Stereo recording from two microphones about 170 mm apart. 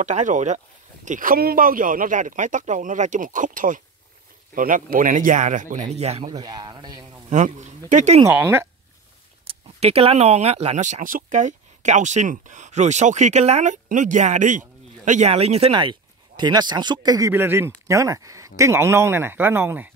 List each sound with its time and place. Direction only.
0.0 s speech: 45° right (ahead or behind)
6.3 s speech: 25° right (ahead or behind)
7.2 s speech: 45° right (ahead or behind)
8.3 s speech: 15° right (ahead or behind)
9.5 s speech: 35° right (ahead or behind)
17.3 s speech: 10° right (ahead or behind)